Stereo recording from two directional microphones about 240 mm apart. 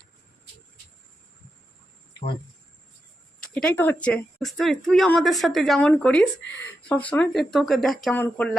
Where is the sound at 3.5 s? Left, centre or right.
Centre.